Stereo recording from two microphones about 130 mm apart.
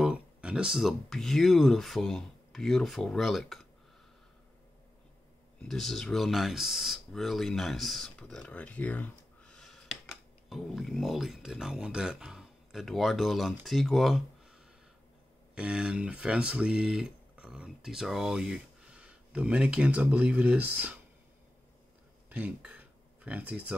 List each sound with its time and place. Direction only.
0.0 s speech: 5° right (ahead or behind)
5.6 s speech: centre (ahead or behind)
15.5 s speech: 10° right (ahead or behind)
22.3 s speech: 10° right (ahead or behind)